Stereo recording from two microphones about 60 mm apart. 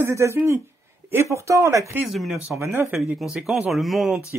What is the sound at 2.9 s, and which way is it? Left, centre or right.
Speech, centre.